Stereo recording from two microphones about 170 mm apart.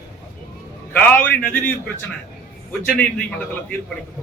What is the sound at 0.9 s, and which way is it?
A man's voice, 10° left (ahead or behind).